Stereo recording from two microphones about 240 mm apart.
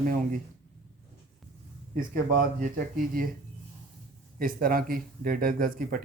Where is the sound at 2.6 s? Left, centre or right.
Right.